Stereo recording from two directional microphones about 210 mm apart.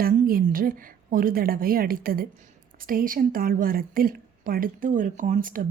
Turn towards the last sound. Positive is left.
turn(degrees=-40)  # may be behind; listen again after turning